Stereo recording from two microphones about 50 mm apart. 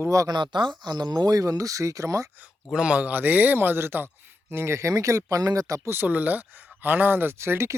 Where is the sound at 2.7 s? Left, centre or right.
Right.